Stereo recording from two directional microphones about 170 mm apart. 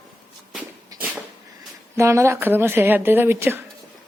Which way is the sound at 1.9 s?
15° right (ahead or behind).